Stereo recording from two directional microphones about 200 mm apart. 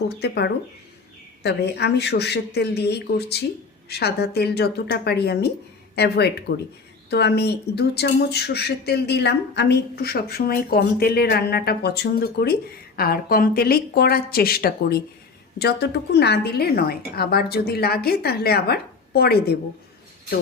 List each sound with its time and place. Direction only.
0.2 s speech: 55° left (ahead or behind)